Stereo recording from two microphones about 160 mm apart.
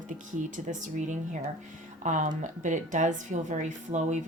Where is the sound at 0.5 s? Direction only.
50° right (ahead or behind).